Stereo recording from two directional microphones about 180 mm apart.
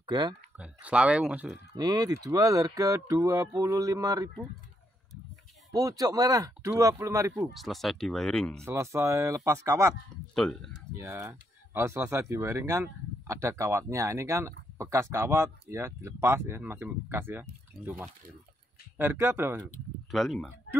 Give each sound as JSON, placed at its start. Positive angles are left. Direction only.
{"t": 0.0, "sound": "speech", "side_deg": -25}
{"t": 0.6, "sound": "speech", "side_deg": -5}
{"t": 1.8, "sound": "speech", "side_deg": -20}
{"t": 5.7, "sound": "speech", "side_deg": -20}
{"t": 7.5, "sound": "speech", "side_deg": 0}
{"t": 8.6, "sound": "speech", "side_deg": -15}
{"t": 10.3, "sound": "speech", "side_deg": 5}
{"t": 11.0, "sound": "speech", "side_deg": -15}
{"t": 20.1, "sound": "speech", "side_deg": 0}